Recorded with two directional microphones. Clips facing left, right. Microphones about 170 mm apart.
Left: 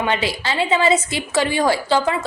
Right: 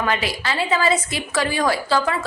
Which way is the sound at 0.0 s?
25° left (ahead or behind).